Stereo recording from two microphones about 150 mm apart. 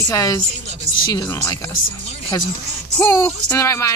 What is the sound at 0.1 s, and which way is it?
Speech, 20° left (ahead or behind).